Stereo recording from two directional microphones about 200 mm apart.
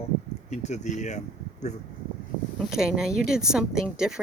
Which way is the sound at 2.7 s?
5° right (ahead or behind).